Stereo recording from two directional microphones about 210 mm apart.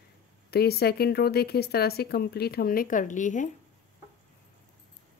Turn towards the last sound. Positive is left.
turn(degrees=35)  # may be behind; listen again after turning